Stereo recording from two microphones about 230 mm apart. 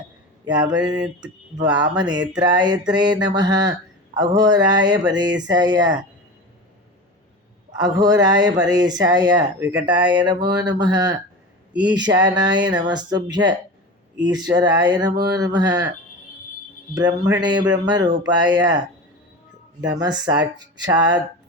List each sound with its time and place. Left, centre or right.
0.4 s speech: centre
7.8 s speech: centre
9.6 s speech: centre
9.9 s a sound: centre
10.6 s speech: centre
11.7 s speech: centre
11.9 s speech: centre
16.9 s speech: centre
18.3 s a sound: centre
20.0 s speech: centre